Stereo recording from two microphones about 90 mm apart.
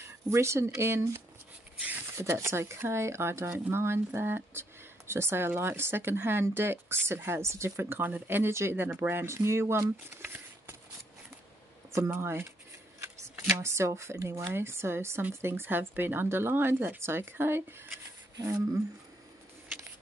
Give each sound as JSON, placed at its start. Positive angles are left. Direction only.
{"t": 0.0, "sound": "a woman's voice", "side_deg": -30}
{"t": 10.2, "sound": "patter", "side_deg": -25}
{"t": 11.9, "sound": "a woman's voice", "side_deg": -30}
{"t": 13.0, "sound": "shuffling cards", "side_deg": -30}
{"t": 13.6, "sound": "a woman's voice", "side_deg": -30}